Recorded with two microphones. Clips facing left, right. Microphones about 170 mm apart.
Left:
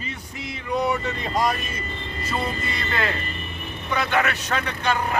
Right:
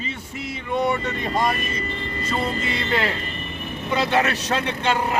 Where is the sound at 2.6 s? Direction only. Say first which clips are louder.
Right 3 dB; 20° right (ahead or behind).